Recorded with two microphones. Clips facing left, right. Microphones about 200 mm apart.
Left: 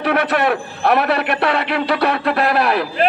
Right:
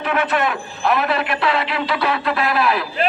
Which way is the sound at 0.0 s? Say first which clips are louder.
Left 3 dB; 65° left (ahead or behind).